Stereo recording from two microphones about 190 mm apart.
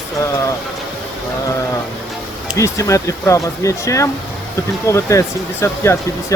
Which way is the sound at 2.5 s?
15° left (ahead or behind).